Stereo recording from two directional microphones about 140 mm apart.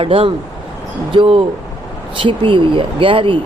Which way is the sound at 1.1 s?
40° right (ahead or behind).